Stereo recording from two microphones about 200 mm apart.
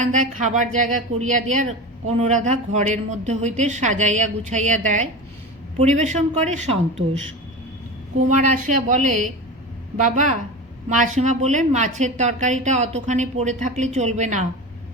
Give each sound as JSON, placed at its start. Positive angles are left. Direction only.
{"t": 0.0, "sound": "speech", "side_deg": -40}
{"t": 8.5, "sound": "speech", "side_deg": -40}
{"t": 10.8, "sound": "speech", "side_deg": -40}